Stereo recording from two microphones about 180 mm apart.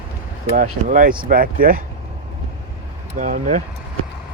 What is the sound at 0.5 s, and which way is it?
Speech, 45° right (ahead or behind).